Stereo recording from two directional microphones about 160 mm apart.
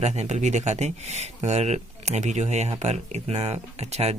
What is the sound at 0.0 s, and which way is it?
Speech, 45° right (ahead or behind).